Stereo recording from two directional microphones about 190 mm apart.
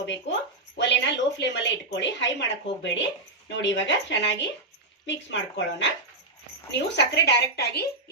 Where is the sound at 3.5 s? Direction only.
70° left (ahead or behind).